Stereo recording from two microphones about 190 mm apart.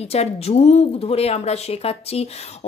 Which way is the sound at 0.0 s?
35° left (ahead or behind).